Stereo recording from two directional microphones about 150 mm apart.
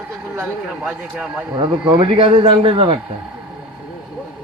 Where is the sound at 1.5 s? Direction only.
35° right (ahead or behind).